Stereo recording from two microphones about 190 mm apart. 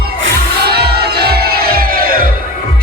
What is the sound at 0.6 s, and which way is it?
Music, 55° right (ahead or behind).